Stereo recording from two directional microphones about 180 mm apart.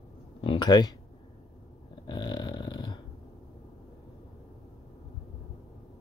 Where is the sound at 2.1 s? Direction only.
25° left (ahead or behind).